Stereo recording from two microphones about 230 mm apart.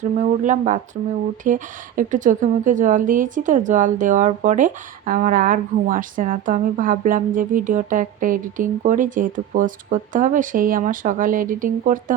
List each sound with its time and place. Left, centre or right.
0.2 s a woman's voice: right